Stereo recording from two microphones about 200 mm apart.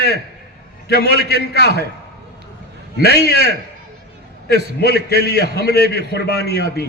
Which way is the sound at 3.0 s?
55° left (ahead or behind).